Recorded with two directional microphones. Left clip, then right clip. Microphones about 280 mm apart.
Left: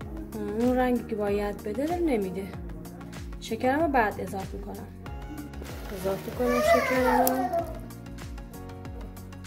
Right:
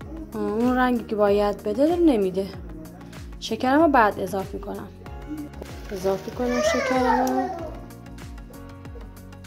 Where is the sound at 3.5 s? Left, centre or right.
Centre.